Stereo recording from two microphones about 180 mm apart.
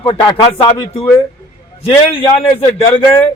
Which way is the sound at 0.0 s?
25° left (ahead or behind).